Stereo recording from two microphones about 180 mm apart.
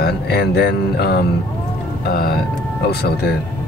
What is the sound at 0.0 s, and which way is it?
Speech, 60° left (ahead or behind).